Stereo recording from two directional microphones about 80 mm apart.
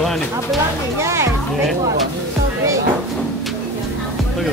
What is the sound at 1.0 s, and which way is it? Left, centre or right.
Speech, right.